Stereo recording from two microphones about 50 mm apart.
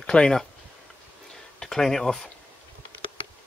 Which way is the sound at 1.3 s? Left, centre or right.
Centre.